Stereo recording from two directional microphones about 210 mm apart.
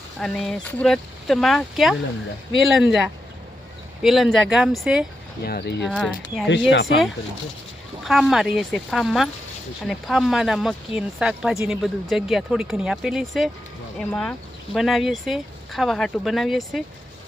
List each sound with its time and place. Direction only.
0.2 s speech: 5° left (ahead or behind)
4.0 s speech: centre (ahead or behind)
5.5 s speech: 50° left (ahead or behind)
5.8 s speech: centre (ahead or behind)
6.7 s speech: 60° left (ahead or behind)
8.0 s speech: centre (ahead or behind)
11.8 s speech: centre (ahead or behind)